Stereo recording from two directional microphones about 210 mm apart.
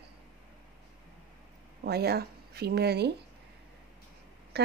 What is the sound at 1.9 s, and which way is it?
A woman's voice, 50° right (ahead or behind).